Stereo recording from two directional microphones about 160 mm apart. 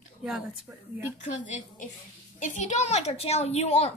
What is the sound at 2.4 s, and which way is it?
A woman's voice, 50° left (ahead or behind).